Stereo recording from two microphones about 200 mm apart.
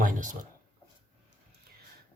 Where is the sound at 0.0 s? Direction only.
40° right (ahead or behind).